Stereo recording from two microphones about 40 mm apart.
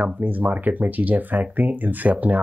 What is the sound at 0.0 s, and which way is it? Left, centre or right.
Speech, right.